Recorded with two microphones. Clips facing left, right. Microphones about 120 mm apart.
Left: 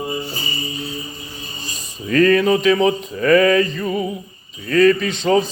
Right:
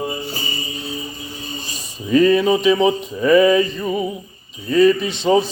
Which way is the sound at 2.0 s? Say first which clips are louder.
Even; 20° right (ahead or behind).